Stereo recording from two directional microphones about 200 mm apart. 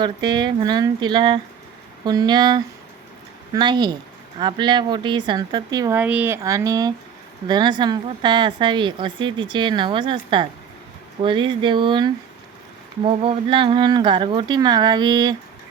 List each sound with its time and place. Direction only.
0.3 s a woman's voice: 20° right (ahead or behind)
6.0 s a woman's voice: 10° right (ahead or behind)